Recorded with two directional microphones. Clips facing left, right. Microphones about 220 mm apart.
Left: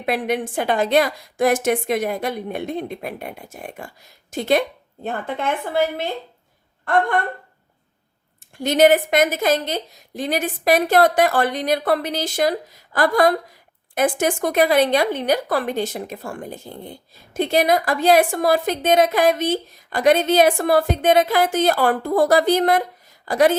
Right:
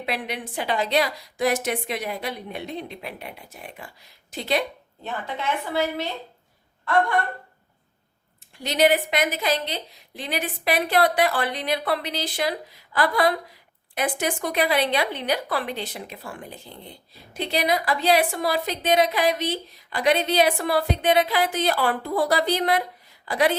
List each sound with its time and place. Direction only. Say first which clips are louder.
0.0 s speech: left 8 dB; 50° left (ahead or behind)
8.5 s speech: left 6 dB; 50° left (ahead or behind)